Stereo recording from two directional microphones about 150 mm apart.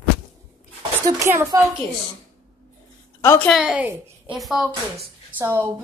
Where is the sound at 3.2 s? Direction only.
15° left (ahead or behind).